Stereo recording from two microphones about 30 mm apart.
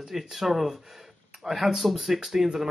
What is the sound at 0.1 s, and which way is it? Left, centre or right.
Speech, centre.